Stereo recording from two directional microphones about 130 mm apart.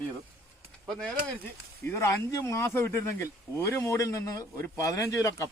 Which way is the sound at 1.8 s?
20° left (ahead or behind).